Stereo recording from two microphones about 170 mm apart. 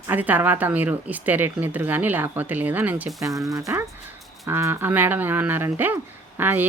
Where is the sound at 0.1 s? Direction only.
10° right (ahead or behind).